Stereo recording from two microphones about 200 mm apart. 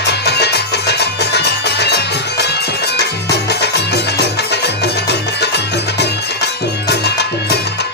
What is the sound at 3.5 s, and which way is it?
Music, 55° left (ahead or behind).